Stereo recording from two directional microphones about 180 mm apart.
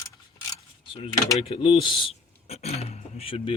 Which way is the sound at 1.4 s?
30° left (ahead or behind).